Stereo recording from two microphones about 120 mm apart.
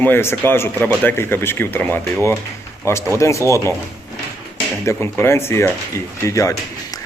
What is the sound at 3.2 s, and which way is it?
Speech, 25° left (ahead or behind).